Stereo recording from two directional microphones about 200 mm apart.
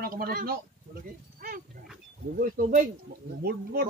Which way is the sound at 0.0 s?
45° right (ahead or behind).